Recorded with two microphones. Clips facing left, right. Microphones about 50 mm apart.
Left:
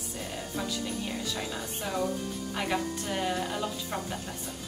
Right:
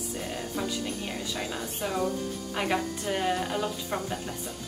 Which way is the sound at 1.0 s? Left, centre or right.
Centre.